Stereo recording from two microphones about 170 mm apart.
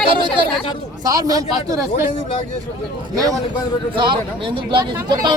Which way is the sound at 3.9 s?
30° right (ahead or behind).